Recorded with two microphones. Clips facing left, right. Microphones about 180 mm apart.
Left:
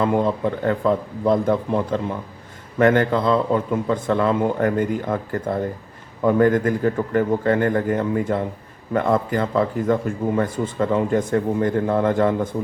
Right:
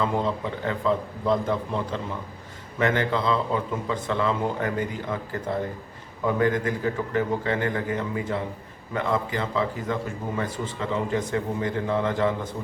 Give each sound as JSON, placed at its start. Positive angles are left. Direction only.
{"t": 0.0, "sound": "a man's voice", "side_deg": 50}